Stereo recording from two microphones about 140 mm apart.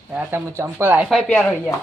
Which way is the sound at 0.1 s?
15° right (ahead or behind).